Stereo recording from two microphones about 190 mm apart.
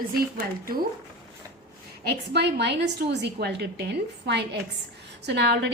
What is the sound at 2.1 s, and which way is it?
A woman's voice, 60° right (ahead or behind).